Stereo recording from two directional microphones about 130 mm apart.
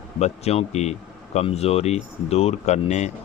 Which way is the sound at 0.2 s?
55° left (ahead or behind).